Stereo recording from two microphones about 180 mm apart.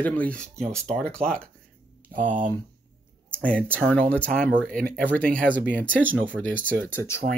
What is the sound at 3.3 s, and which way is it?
Speech, 5° left (ahead or behind).